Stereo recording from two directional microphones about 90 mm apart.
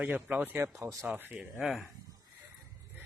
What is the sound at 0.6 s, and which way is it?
Speech, 35° right (ahead or behind).